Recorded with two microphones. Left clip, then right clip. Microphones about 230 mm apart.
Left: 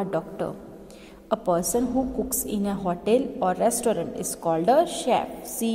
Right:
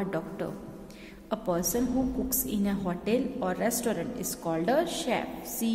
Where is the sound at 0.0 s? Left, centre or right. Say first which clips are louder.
Left 5 dB; centre.